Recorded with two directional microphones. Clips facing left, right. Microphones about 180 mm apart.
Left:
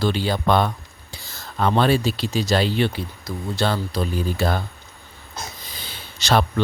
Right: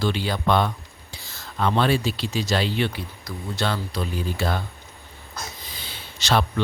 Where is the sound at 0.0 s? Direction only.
35° left (ahead or behind).